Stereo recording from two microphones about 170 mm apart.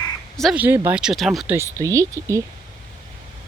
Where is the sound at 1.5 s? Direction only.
15° right (ahead or behind).